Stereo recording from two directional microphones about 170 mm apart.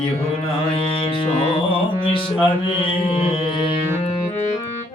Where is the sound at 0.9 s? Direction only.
30° left (ahead or behind).